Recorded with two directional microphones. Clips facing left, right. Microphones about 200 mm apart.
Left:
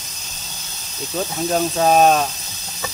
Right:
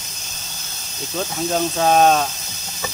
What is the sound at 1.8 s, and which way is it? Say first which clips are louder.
Speech: left 1 dB; 5° left (ahead or behind).